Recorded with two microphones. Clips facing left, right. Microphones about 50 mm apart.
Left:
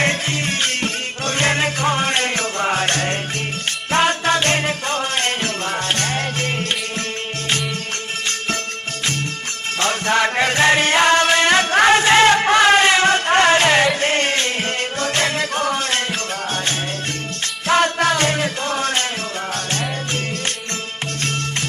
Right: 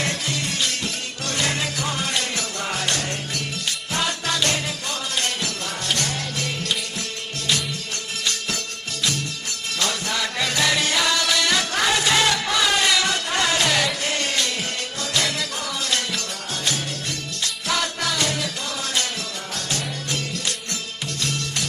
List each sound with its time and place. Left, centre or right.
0.0 s music: left
9.8 s music: left
17.7 s music: left